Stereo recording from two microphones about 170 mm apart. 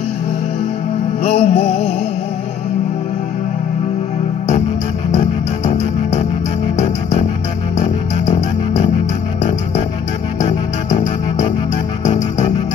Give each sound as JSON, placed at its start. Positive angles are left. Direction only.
{"t": 1.2, "sound": "music", "side_deg": 40}
{"t": 10.9, "sound": "music", "side_deg": 45}